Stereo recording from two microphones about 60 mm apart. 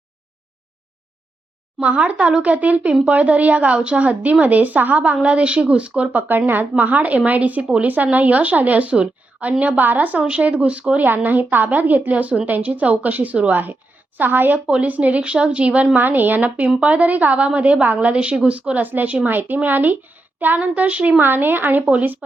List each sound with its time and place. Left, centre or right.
1.8 s a woman's voice: centre
16.0 s a woman's voice: right
21.2 s a woman's voice: right